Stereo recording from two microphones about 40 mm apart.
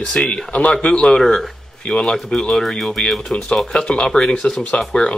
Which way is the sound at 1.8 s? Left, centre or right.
Left.